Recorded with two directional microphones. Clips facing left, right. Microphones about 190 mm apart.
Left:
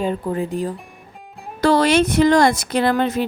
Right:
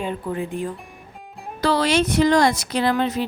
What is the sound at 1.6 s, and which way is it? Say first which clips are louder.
A woman's voice: left 4 dB; 50° left (ahead or behind).